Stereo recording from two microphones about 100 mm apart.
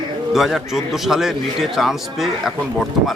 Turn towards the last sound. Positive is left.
turn(degrees=0)  # may be behind; listen again after turning